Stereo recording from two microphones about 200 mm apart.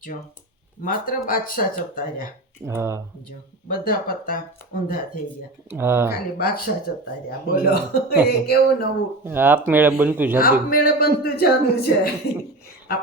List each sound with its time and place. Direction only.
0.8 s a man's voice: 45° left (ahead or behind)
2.6 s speech: 15° right (ahead or behind)
3.7 s a man's voice: 45° left (ahead or behind)
5.7 s speech: 10° right (ahead or behind)
6.4 s a man's voice: 45° left (ahead or behind)
9.2 s speech: 10° right (ahead or behind)
10.4 s a man's voice: 45° left (ahead or behind)